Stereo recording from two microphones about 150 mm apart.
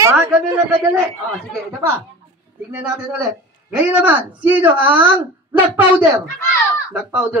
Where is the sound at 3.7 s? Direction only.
10° right (ahead or behind).